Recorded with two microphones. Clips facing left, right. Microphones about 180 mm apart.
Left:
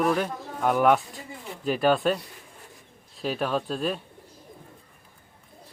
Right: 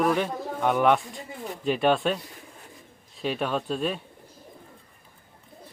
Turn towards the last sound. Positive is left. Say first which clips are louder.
# even
turn(degrees=0)  # may be behind; listen again after turning